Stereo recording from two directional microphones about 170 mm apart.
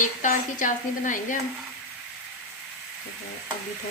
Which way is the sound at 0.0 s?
50° left (ahead or behind).